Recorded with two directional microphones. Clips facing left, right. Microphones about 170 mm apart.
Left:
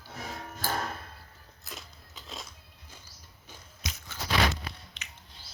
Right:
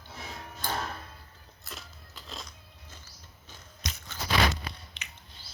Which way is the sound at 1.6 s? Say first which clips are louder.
Even; centre (ahead or behind).